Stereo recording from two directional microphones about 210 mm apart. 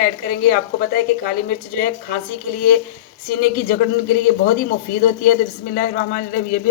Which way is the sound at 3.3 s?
40° left (ahead or behind).